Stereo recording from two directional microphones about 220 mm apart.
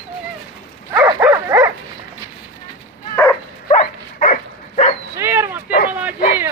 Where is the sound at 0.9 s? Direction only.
15° right (ahead or behind).